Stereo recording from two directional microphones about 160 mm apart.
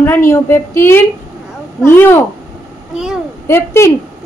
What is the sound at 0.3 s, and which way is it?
Female singing, 15° left (ahead or behind).